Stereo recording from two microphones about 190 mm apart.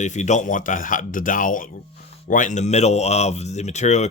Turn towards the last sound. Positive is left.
turn(degrees=35)  # may be behind; listen again after turning